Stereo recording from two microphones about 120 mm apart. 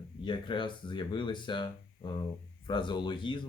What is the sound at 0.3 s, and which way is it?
Speech, 40° left (ahead or behind).